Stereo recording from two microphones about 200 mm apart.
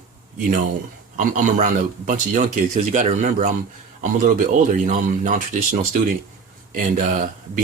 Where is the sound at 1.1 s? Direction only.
40° right (ahead or behind).